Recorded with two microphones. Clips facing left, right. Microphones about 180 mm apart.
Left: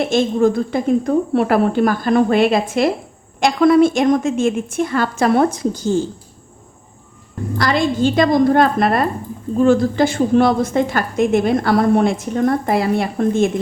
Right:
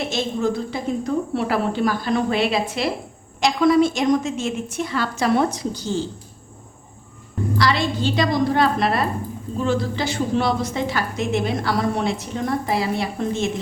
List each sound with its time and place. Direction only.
0.0 s a woman's voice: 50° left (ahead or behind)
7.6 s a woman's voice: 50° left (ahead or behind)